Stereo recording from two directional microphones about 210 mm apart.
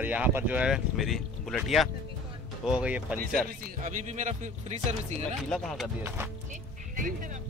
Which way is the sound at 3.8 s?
35° right (ahead or behind).